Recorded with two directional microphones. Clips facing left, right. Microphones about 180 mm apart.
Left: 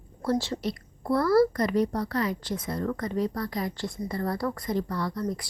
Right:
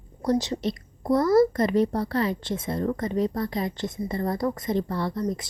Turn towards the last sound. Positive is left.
turn(degrees=-20)  # may be behind; listen again after turning